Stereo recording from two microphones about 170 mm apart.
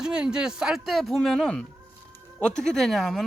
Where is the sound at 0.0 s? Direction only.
5° right (ahead or behind).